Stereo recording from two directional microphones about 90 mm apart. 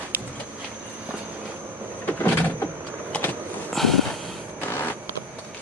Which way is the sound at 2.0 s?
20° left (ahead or behind).